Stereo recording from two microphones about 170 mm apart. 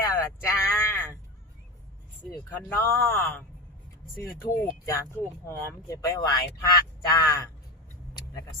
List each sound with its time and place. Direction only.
0.0 s a sound: 20° left (ahead or behind)
2.3 s speech: 10° left (ahead or behind)
8.1 s car: 20° left (ahead or behind)